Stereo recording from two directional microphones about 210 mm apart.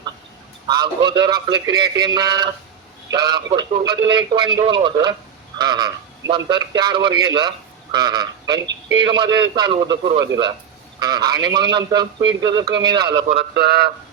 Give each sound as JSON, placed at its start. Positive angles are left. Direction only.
{"t": 0.7, "sound": "a man's voice", "side_deg": -20}
{"t": 13.5, "sound": "speech", "side_deg": -50}